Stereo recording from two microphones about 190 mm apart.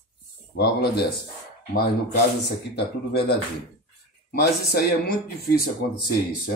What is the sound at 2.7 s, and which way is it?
Speech, 60° left (ahead or behind).